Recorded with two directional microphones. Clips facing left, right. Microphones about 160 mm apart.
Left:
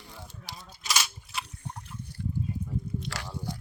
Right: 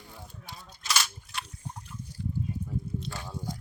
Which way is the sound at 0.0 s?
90° left.